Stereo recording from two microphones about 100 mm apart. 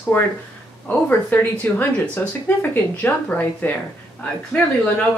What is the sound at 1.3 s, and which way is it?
Speech, 20° left (ahead or behind).